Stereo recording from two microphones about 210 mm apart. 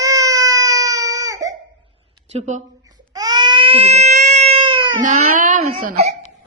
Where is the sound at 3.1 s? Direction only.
20° right (ahead or behind).